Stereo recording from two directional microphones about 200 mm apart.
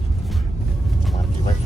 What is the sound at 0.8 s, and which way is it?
Vehicle, centre (ahead or behind).